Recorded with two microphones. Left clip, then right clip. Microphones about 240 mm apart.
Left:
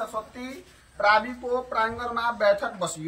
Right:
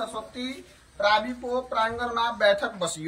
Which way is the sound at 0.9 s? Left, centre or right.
Centre.